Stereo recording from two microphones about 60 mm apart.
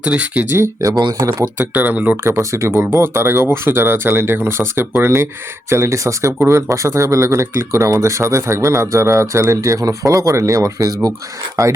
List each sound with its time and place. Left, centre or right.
0.0 s speech: right
0.8 s speech: right
1.5 s speech: right
2.4 s speech: right
9.5 s speech: right
11.6 s speech: right